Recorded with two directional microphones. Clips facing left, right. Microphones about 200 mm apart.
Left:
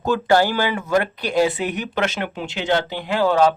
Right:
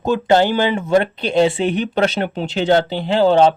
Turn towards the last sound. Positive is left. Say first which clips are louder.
# right 4 dB
turn(degrees=-25)  # may be behind; listen again after turning